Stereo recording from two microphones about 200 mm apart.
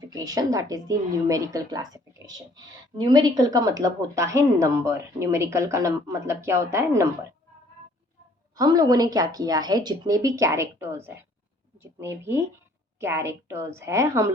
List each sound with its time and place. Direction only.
0.1 s a woman's voice: 20° right (ahead or behind)
8.5 s a woman's voice: 20° right (ahead or behind)